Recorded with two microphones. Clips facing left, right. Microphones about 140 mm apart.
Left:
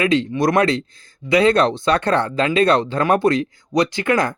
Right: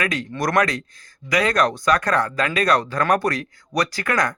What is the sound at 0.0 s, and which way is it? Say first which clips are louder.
Speech: left 7 dB; 25° left (ahead or behind).